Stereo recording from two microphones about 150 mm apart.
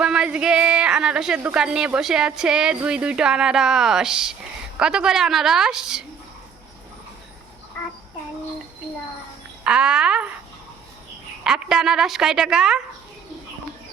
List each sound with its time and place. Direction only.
0.0 s a sound: 5° right (ahead or behind)
1.4 s speech: 10° right (ahead or behind)
9.6 s speech: 5° right (ahead or behind)
11.4 s speech: 5° right (ahead or behind)